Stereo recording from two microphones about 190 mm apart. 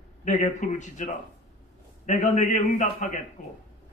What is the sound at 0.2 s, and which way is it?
Speech, 40° left (ahead or behind).